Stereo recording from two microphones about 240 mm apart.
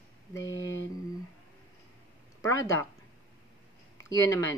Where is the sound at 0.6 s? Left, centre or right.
Left.